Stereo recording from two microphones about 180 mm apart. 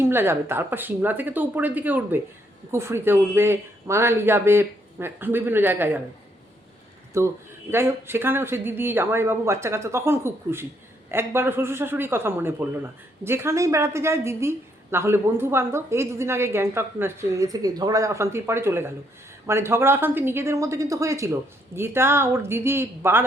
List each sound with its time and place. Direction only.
0.0 s speech: 15° right (ahead or behind)
7.1 s speech: 15° right (ahead or behind)